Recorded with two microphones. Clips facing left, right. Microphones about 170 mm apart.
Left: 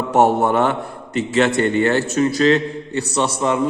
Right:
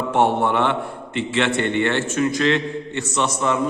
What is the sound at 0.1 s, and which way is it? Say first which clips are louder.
A man's voice: left 4 dB; 40° left (ahead or behind).